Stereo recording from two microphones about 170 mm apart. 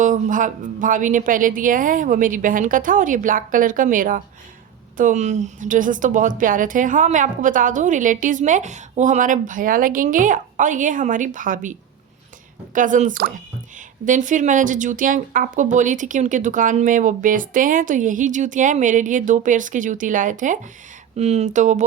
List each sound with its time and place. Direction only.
0.0 s a woman's voice: 50° right (ahead or behind)